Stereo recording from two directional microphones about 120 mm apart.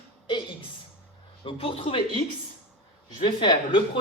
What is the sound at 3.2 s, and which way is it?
Speech, 45° left (ahead or behind).